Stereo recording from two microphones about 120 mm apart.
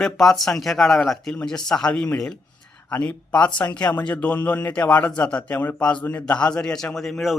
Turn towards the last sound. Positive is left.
turn(degrees=0)  # may be behind; listen again after turning